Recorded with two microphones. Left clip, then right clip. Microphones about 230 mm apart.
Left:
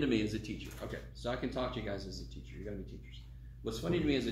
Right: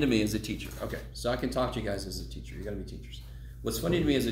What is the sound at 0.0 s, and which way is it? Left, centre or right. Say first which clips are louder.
Speech: right 6 dB; right.